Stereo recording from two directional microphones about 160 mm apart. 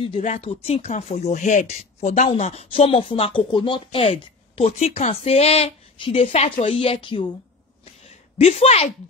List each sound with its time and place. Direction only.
0.4 s speech: 35° left (ahead or behind)
8.4 s speech: 40° left (ahead or behind)